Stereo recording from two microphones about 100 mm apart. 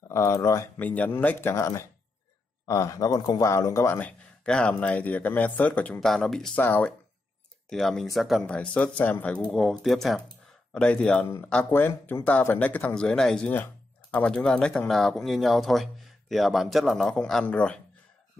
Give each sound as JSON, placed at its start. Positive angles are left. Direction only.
{"t": 0.1, "sound": "speech", "side_deg": 30}
{"t": 0.7, "sound": "speech", "side_deg": 15}
{"t": 4.5, "sound": "speech", "side_deg": 10}
{"t": 5.9, "sound": "speech", "side_deg": 5}
{"t": 6.6, "sound": "speech", "side_deg": 20}
{"t": 7.7, "sound": "speech", "side_deg": 5}
{"t": 8.4, "sound": "speech", "side_deg": 10}